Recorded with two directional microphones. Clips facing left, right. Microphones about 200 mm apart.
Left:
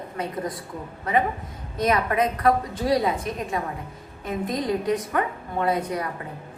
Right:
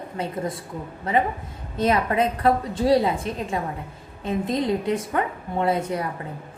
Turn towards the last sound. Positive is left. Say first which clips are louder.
# right 1 dB
turn(degrees=-25)  # may be behind; listen again after turning